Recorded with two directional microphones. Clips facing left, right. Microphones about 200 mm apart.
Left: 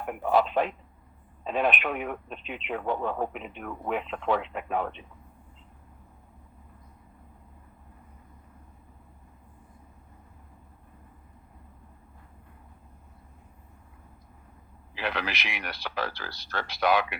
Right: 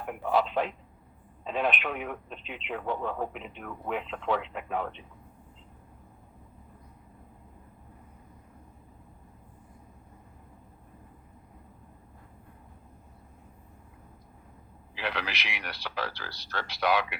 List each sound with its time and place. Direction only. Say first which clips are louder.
0.2 s telephone: left 3 dB; 50° left (ahead or behind)
1.5 s speech: left 3 dB; 50° left (ahead or behind)
14.9 s speech: left 2 dB; 50° left (ahead or behind)